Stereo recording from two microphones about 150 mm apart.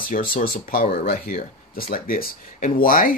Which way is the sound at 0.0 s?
65° left (ahead or behind).